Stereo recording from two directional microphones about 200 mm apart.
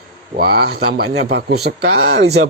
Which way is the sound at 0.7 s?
50° right (ahead or behind).